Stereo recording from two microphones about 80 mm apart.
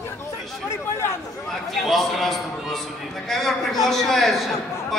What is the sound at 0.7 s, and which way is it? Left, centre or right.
Chatter, left.